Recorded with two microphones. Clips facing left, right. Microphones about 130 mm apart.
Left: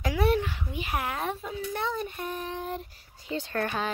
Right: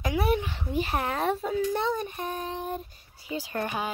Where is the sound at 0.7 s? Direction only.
30° right (ahead or behind).